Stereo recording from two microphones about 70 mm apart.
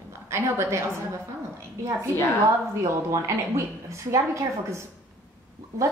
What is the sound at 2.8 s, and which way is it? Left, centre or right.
A woman's voice, right.